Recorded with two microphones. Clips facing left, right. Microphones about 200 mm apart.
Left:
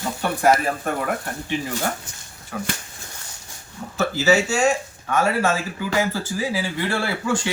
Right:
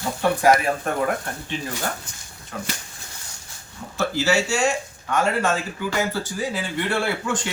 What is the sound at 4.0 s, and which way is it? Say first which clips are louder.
Speech: left 2 dB; 5° left (ahead or behind).